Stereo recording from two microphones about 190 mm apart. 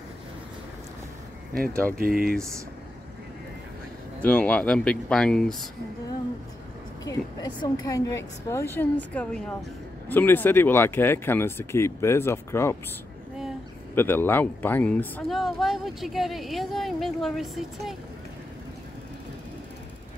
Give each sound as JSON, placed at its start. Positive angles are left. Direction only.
{"t": 1.9, "sound": "speech", "side_deg": -50}
{"t": 4.2, "sound": "speech", "side_deg": 5}
{"t": 7.1, "sound": "speech", "side_deg": 20}
{"t": 13.9, "sound": "speech", "side_deg": 10}